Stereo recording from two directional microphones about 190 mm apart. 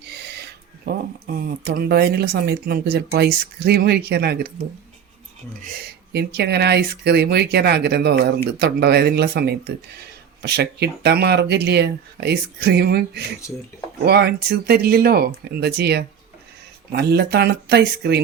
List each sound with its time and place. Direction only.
0.0 s a sound: 60° right (ahead or behind)
0.9 s speech: 55° right (ahead or behind)
6.1 s speech: 60° right (ahead or behind)